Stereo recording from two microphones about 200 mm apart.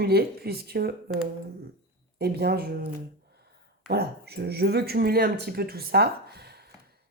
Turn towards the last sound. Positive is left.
turn(degrees=-55)  # may be behind; listen again after turning